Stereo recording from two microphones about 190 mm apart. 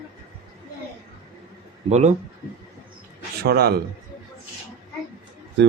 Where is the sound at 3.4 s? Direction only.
55° right (ahead or behind).